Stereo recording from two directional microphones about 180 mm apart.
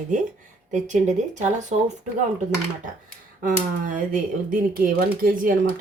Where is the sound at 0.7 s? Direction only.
40° right (ahead or behind).